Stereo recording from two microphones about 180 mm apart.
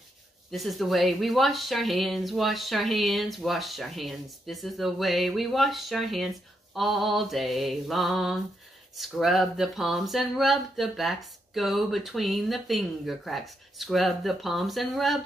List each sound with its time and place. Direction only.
0.5 s speech: centre (ahead or behind)